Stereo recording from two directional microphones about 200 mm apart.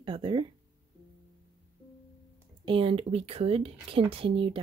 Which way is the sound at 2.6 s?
25° right (ahead or behind).